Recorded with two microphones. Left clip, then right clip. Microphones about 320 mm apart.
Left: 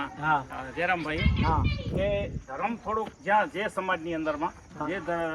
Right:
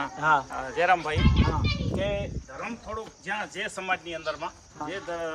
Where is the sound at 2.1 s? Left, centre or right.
Centre.